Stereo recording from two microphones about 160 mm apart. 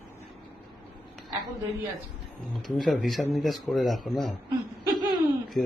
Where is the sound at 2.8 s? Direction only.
Centre (ahead or behind).